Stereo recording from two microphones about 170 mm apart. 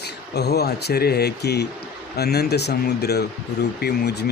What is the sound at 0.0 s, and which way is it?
Speech, 75° left (ahead or behind).